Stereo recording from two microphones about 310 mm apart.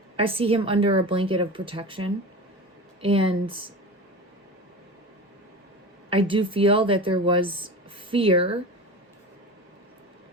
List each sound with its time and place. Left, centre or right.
0.2 s a woman's voice: centre
6.1 s a woman's voice: centre